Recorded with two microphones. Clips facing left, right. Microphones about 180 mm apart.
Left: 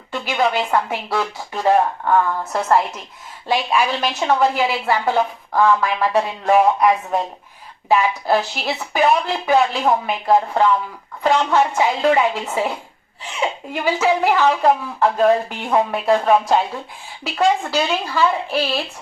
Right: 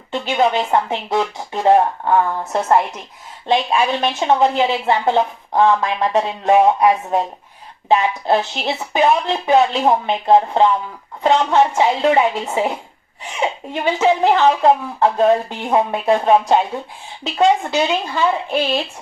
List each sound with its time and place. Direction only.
0.1 s a woman's voice: 25° right (ahead or behind)
13.8 s a woman's voice: 20° right (ahead or behind)